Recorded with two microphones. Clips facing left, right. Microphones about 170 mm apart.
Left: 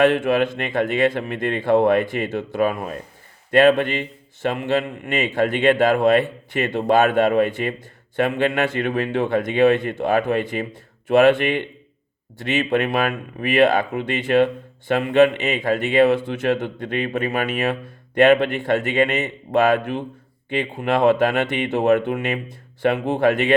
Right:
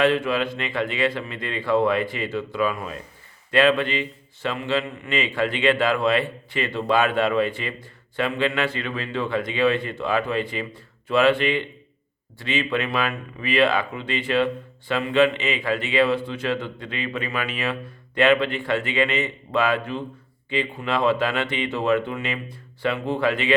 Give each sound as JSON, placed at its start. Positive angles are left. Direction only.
{"t": 0.0, "sound": "speech", "side_deg": 50}